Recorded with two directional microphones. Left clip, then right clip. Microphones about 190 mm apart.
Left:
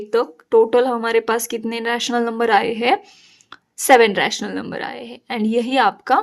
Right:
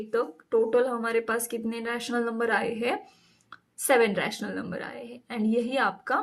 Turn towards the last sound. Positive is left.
turn(degrees=50)  # may be behind; listen again after turning